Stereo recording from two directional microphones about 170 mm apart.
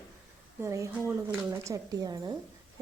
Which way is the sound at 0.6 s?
15° right (ahead or behind).